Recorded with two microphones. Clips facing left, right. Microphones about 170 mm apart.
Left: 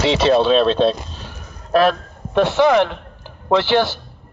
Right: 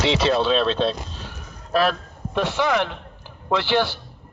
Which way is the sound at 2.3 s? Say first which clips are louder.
Left 8 dB; 65° left (ahead or behind).